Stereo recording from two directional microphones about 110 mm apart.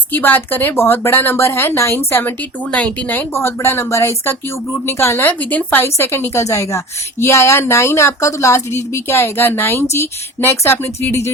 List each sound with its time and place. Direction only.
0.1 s speech: 15° left (ahead or behind)